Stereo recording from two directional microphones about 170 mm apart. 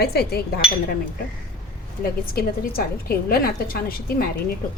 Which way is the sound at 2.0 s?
60° left (ahead or behind).